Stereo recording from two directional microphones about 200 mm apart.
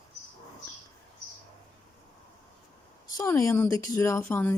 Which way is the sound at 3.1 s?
15° left (ahead or behind).